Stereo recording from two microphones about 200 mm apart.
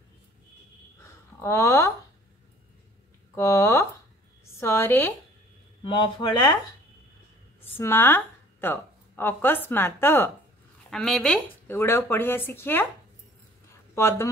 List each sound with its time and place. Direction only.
1.0 s a sound: 10° left (ahead or behind)
3.3 s speech: 15° left (ahead or behind)
5.9 s speech: 25° left (ahead or behind)
7.7 s a woman's voice: 10° left (ahead or behind)
13.9 s speech: 15° left (ahead or behind)